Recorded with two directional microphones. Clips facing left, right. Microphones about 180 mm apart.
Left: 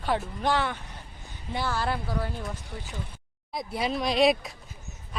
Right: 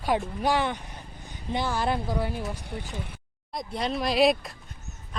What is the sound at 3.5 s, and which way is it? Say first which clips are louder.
Speech: even; 5° left (ahead or behind).